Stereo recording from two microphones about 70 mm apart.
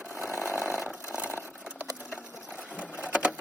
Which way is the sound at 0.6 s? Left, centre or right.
Centre.